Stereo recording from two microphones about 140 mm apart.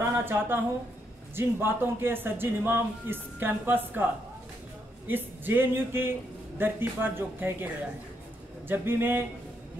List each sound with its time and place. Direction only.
0.2 s a man's voice: 15° right (ahead or behind)
5.0 s a man's voice: 15° right (ahead or behind)